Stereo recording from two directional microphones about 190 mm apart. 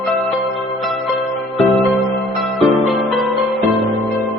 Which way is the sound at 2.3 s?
Centre (ahead or behind).